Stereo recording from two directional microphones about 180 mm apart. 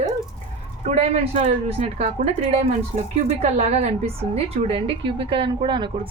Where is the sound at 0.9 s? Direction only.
40° right (ahead or behind).